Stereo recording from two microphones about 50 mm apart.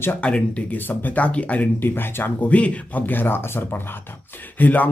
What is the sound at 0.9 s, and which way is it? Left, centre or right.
Speech, left.